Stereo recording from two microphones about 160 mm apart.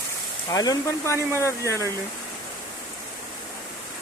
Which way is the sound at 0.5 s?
25° left (ahead or behind).